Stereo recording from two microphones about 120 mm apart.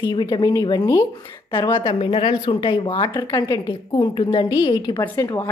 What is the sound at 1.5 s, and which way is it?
Speech, 45° left (ahead or behind).